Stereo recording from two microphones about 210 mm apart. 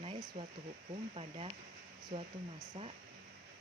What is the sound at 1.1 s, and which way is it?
Speech, 30° right (ahead or behind).